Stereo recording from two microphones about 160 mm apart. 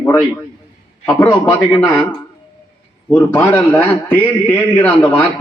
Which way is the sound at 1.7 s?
10° left (ahead or behind).